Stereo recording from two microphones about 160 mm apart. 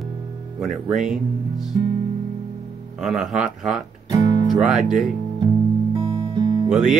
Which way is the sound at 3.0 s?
Centre (ahead or behind).